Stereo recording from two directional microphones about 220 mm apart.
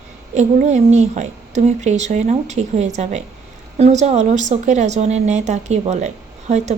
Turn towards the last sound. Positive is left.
turn(degrees=-30)  # may be behind; listen again after turning